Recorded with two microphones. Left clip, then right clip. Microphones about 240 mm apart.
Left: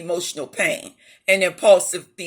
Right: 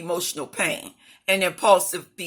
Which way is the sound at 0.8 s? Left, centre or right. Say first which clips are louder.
Left 2 dB; right.